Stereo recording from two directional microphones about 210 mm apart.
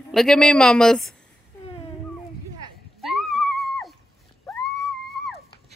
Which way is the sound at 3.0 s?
Centre (ahead or behind).